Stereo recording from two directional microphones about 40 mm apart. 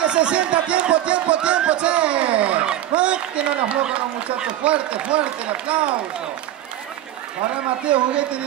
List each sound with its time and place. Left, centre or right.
0.0 s music: right
4.6 s a man's voice: right
7.8 s a man's voice: right